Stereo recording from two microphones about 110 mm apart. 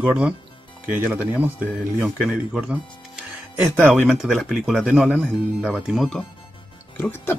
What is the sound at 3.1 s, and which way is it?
Music, 10° right (ahead or behind).